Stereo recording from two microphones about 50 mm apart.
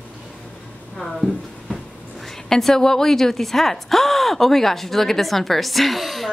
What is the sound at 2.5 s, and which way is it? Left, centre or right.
Speech, centre.